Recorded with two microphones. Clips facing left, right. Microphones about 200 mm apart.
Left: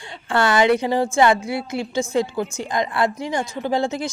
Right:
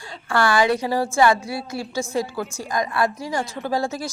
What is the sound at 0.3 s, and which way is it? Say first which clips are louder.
A woman's voice: left 2 dB; 20° left (ahead or behind).